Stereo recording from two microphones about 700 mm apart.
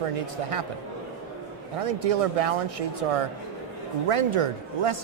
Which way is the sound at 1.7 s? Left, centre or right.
Right.